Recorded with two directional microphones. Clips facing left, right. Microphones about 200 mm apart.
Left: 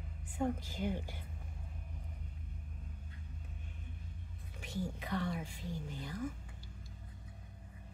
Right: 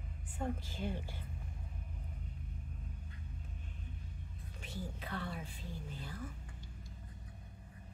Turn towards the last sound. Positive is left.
turn(degrees=15)  # may be behind; listen again after turning